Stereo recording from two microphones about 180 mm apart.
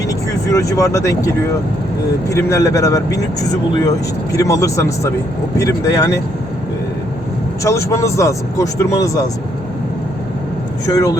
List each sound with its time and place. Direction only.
0.1 s speech: 20° left (ahead or behind)
2.3 s speech: 15° left (ahead or behind)
7.6 s speech: 15° left (ahead or behind)
10.9 s speech: 20° left (ahead or behind)